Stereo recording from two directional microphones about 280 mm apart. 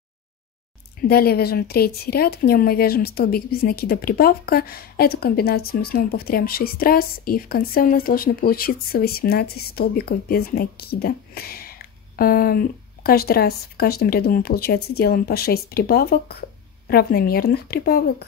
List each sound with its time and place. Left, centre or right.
1.0 s a woman's voice: left